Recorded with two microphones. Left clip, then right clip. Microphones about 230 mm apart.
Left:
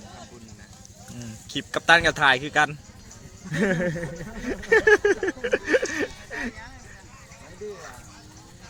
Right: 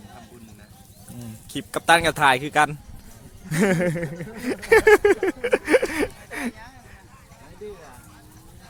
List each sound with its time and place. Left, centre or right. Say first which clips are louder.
1.5 s speech: even; centre